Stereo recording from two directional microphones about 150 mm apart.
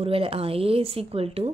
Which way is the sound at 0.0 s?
40° right (ahead or behind).